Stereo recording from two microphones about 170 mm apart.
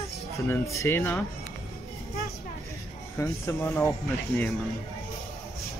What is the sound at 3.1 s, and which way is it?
Speech, 15° left (ahead or behind).